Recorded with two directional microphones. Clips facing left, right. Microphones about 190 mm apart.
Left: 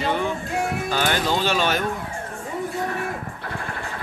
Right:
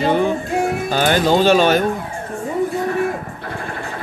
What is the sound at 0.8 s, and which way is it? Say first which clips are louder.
Speech: right 8 dB; 40° right (ahead or behind).